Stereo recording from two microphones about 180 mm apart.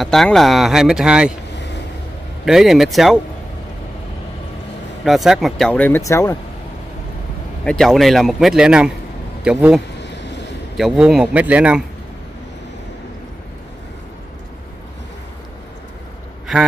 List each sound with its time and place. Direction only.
0.0 s speech: centre (ahead or behind)
2.4 s speech: centre (ahead or behind)
5.0 s speech: centre (ahead or behind); by 6.3 s 15° left (ahead or behind)
7.6 s a man's voice: centre (ahead or behind)
9.9 s a sound: 75° left (ahead or behind)
10.8 s speech: 5° right (ahead or behind)
16.5 s speech: centre (ahead or behind)